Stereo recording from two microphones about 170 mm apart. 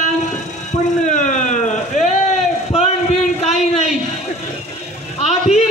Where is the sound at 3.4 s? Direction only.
40° left (ahead or behind).